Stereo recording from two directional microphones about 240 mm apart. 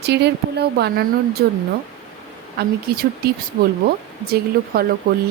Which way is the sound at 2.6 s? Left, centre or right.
Right.